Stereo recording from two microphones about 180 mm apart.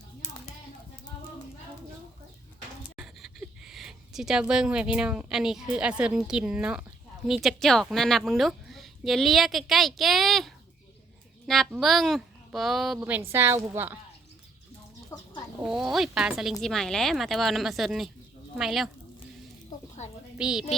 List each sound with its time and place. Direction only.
2.9 s a woman's voice: centre (ahead or behind)
15.1 s chicken: 15° left (ahead or behind)
15.6 s speech: 5° right (ahead or behind)
20.4 s speech: 5° right (ahead or behind)